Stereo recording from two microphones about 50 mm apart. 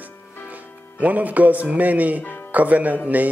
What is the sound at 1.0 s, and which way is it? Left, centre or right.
Speech, right.